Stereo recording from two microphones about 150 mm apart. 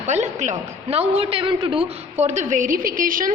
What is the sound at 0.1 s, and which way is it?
A man's voice, 50° right (ahead or behind).